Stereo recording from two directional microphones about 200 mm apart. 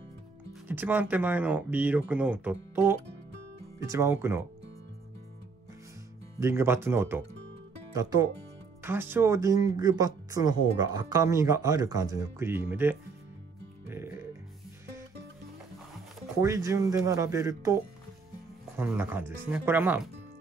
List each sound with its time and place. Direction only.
0.7 s speech: 10° right (ahead or behind)
6.4 s speech: 10° right (ahead or behind)
13.8 s music: 10° right (ahead or behind)
16.3 s speech: 15° right (ahead or behind)
18.8 s speech: 10° right (ahead or behind)